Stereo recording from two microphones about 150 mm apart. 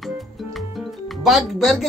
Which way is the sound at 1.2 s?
Centre (ahead or behind).